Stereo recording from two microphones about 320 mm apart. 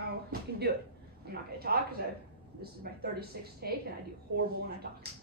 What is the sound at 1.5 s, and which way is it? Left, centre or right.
A woman's voice, right.